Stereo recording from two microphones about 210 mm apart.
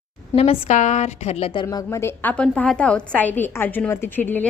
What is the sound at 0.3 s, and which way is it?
A woman's voice, 30° left (ahead or behind).